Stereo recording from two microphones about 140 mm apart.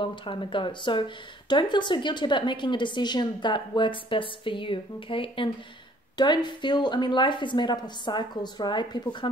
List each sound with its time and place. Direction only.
0.0 s speech: 35° left (ahead or behind)